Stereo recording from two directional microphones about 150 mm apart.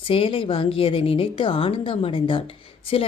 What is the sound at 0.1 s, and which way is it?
Speech, 35° left (ahead or behind).